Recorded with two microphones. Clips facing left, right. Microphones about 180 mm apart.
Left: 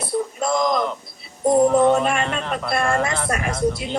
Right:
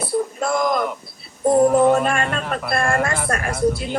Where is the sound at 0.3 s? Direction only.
5° right (ahead or behind).